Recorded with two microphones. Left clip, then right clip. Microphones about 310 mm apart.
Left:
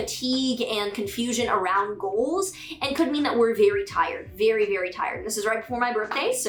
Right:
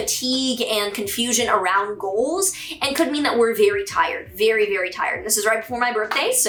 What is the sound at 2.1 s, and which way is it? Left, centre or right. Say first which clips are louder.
Speech: right 3 dB; left.